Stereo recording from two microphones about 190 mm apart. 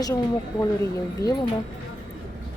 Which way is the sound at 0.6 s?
20° left (ahead or behind).